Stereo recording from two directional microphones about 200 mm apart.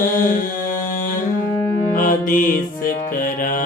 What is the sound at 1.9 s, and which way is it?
Music, 40° left (ahead or behind).